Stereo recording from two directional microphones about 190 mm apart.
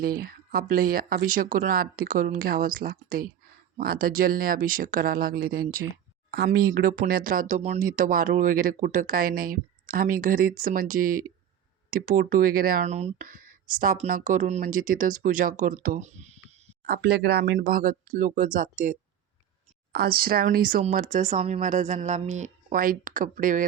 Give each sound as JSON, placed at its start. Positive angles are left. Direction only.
{"t": 0.0, "sound": "speech", "side_deg": -50}
{"t": 16.8, "sound": "speech", "side_deg": -55}